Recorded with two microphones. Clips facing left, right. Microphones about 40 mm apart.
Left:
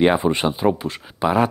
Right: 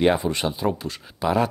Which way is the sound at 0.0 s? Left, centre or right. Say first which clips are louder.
Left 3 dB; left.